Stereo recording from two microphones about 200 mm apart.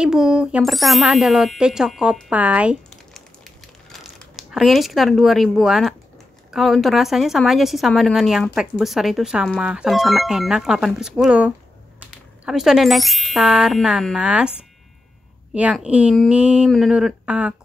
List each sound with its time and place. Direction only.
0.0 s a woman's voice: 5° right (ahead or behind)
15.5 s a woman's voice: 5° right (ahead or behind)